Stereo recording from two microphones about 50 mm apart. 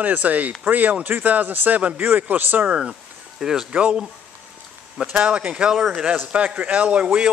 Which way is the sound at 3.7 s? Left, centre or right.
Right.